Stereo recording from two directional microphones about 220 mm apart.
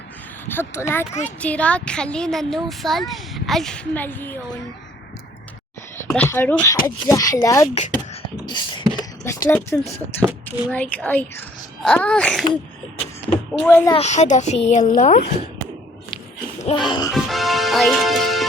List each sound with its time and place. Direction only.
0.4 s a woman's voice: 10° left (ahead or behind)
6.1 s a woman's voice: 10° left (ahead or behind)
8.4 s beatboxing: 20° left (ahead or behind)
9.0 s a sound: 15° left (ahead or behind)
10.2 s a woman's voice: 5° left (ahead or behind)
13.6 s a woman's voice: 10° left (ahead or behind)
13.9 s speech: 30° left (ahead or behind)
16.6 s music: 20° left (ahead or behind)
17.1 s music: centre (ahead or behind)